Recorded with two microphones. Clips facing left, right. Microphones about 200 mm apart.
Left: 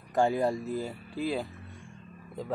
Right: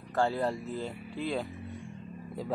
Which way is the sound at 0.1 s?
15° left (ahead or behind).